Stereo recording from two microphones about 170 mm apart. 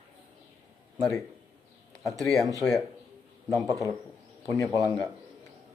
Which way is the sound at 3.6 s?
20° right (ahead or behind).